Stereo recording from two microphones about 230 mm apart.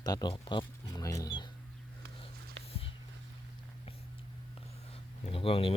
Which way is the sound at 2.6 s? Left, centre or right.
Right.